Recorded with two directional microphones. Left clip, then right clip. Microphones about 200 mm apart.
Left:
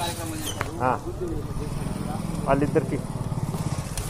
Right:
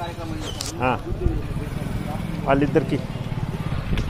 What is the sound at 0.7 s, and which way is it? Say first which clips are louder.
Speech: right 2 dB; 45° right (ahead or behind).